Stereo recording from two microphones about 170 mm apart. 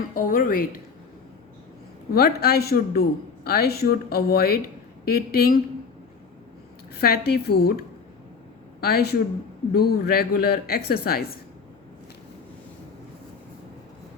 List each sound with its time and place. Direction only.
0.1 s speech: 55° left (ahead or behind)
2.1 s speech: 65° left (ahead or behind)
7.0 s a woman's voice: 65° left (ahead or behind)
8.8 s a woman's voice: 65° left (ahead or behind)